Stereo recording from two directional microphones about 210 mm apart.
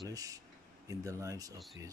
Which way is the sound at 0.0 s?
15° right (ahead or behind).